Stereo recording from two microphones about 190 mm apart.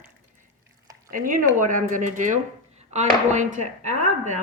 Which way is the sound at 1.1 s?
45° right (ahead or behind).